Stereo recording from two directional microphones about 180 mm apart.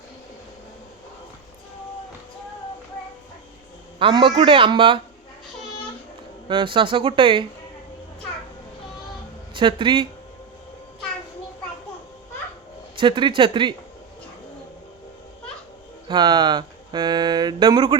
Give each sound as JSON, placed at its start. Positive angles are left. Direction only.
{"t": 3.9, "sound": "a man's voice", "side_deg": -30}
{"t": 6.5, "sound": "speech", "side_deg": -25}
{"t": 9.6, "sound": "speech", "side_deg": -25}
{"t": 13.0, "sound": "speech", "side_deg": -25}
{"t": 16.0, "sound": "speech", "side_deg": -25}